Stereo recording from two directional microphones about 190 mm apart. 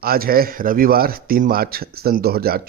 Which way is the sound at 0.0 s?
50° right (ahead or behind).